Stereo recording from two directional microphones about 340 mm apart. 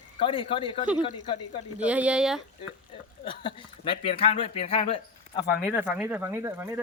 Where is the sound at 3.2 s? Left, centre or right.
Centre.